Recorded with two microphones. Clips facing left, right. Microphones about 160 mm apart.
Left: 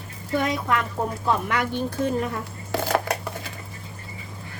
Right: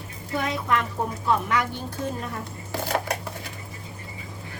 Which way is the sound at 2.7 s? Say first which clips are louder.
Left 4 dB; 75° left (ahead or behind).